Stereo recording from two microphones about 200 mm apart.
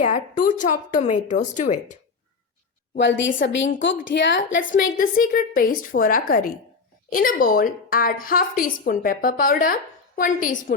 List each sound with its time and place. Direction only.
0.0 s a woman's voice: 40° left (ahead or behind)
3.0 s a woman's voice: 65° left (ahead or behind)
4.9 s a woman's voice: 45° left (ahead or behind)